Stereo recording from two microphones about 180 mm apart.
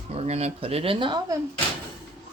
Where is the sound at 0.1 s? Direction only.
35° right (ahead or behind).